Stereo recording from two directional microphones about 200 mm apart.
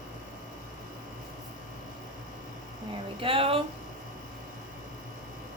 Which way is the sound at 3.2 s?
25° right (ahead or behind).